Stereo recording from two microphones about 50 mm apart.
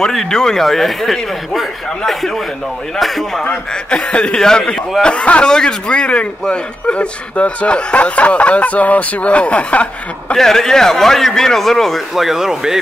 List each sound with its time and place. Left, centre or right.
0.0 s speech: centre
3.4 s speech: left
10.3 s a man's voice: centre
12.2 s speech: centre